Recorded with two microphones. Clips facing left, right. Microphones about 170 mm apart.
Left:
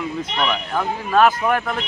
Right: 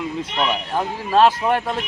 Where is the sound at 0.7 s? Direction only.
30° right (ahead or behind).